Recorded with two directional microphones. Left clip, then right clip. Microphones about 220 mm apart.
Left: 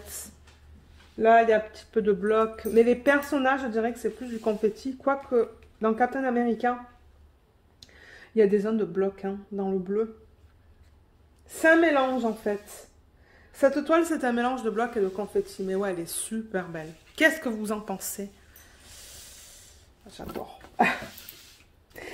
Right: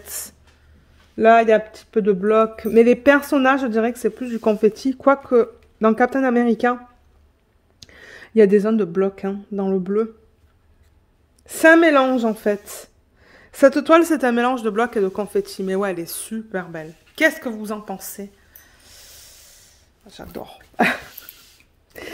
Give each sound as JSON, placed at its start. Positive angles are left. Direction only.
{"t": 1.1, "sound": "speech", "side_deg": -60}
{"t": 7.8, "sound": "speech", "side_deg": -55}
{"t": 11.4, "sound": "speech", "side_deg": -55}